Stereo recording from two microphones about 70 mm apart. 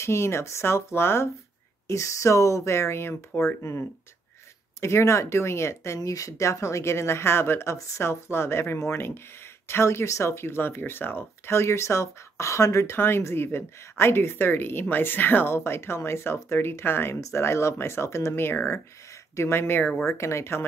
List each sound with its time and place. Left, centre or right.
0.0 s speech: left
1.9 s speech: left
5.9 s speech: left
20.1 s speech: left